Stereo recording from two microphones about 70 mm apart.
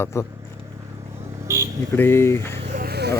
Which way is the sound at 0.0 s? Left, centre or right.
Left.